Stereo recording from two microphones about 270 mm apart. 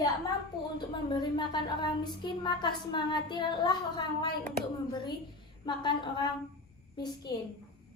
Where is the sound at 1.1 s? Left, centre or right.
Centre.